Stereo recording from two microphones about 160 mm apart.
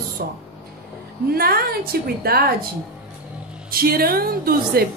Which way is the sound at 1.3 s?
70° right (ahead or behind).